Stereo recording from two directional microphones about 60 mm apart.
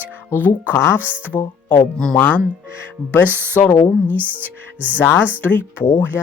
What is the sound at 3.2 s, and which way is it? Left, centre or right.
Music, right.